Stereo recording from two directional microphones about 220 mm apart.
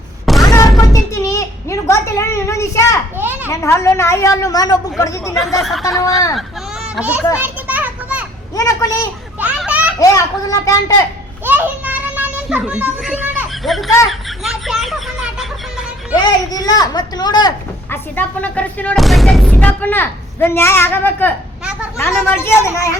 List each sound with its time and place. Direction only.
0.3 s a sound: centre (ahead or behind)
0.8 s a woman's voice: 15° left (ahead or behind)
3.2 s a child's voice: 10° right (ahead or behind)
3.5 s speech: 15° left (ahead or behind)
5.5 s speech: centre (ahead or behind)
6.3 s a sound: centre (ahead or behind)
7.3 s children playing: 10° right (ahead or behind)
8.5 s a sound: 15° left (ahead or behind)
9.4 s children playing: 5° right (ahead or behind)
10.0 s speech: 15° left (ahead or behind)
11.4 s children playing: 5° right (ahead or behind)
14.1 s a sound: centre (ahead or behind)
16.2 s speech: 15° left (ahead or behind)